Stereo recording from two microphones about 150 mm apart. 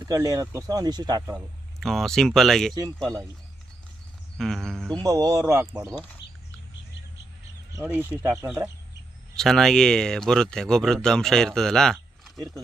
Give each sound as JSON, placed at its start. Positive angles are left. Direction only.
{"t": 0.0, "sound": "speech", "side_deg": -20}
{"t": 1.8, "sound": "speech", "side_deg": 0}
{"t": 2.7, "sound": "speech", "side_deg": -25}
{"t": 4.4, "sound": "music", "side_deg": 5}
{"t": 4.9, "sound": "speech", "side_deg": -25}
{"t": 7.9, "sound": "speech", "side_deg": -10}
{"t": 9.3, "sound": "speech", "side_deg": 5}
{"t": 12.4, "sound": "speech", "side_deg": -25}